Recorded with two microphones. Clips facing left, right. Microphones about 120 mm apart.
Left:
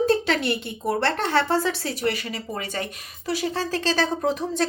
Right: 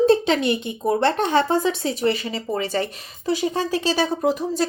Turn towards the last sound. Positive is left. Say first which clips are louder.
# right 3 dB
turn(degrees=-5)  # may be behind; listen again after turning